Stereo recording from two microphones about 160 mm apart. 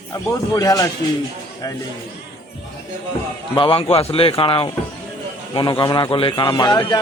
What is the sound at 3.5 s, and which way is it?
A man's voice, 35° left (ahead or behind).